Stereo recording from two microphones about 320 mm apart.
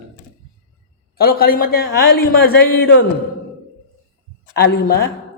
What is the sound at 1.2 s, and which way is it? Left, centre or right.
A man's voice, left.